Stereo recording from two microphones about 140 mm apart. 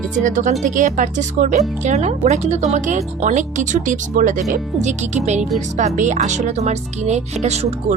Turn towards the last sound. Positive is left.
turn(degrees=-55)  # may be behind; listen again after turning